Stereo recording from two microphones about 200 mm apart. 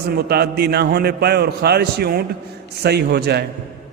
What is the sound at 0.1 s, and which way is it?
A man's voice, 50° right (ahead or behind).